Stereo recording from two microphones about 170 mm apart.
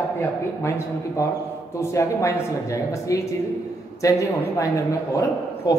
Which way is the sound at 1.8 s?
15° left (ahead or behind).